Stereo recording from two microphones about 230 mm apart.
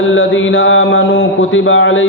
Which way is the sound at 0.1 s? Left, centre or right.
Left.